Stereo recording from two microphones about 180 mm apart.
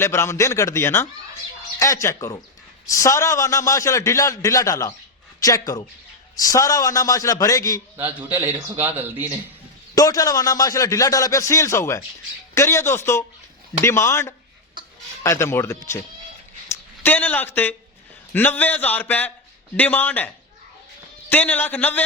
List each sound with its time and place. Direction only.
0.0 s a man's voice: 15° left (ahead or behind)
7.9 s a man's voice: 10° right (ahead or behind)
9.9 s a man's voice: 20° left (ahead or behind)